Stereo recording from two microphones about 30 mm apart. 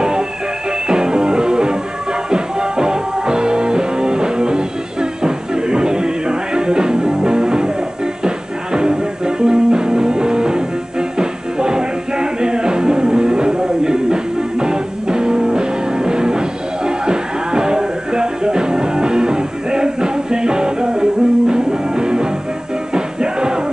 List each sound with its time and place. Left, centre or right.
0.8 s music: centre
8.7 s music: centre
20.8 s music: centre